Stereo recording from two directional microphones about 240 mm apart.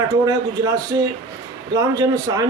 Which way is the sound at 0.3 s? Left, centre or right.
Centre.